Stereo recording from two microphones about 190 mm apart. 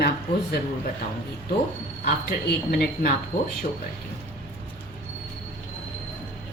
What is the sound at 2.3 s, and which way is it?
Speech, 55° left (ahead or behind).